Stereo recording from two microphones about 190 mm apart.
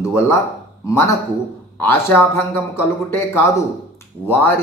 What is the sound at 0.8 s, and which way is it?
A man's voice, 15° left (ahead or behind).